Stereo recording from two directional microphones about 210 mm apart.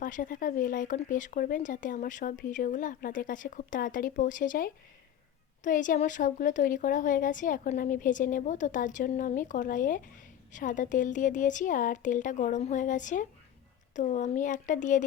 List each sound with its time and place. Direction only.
0.0 s speech: 40° left (ahead or behind)